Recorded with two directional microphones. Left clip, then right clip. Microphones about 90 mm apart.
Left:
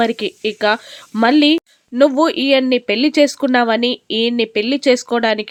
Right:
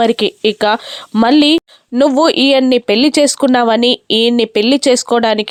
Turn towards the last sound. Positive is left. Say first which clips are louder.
# right 4 dB
turn(degrees=-40)  # may be behind; listen again after turning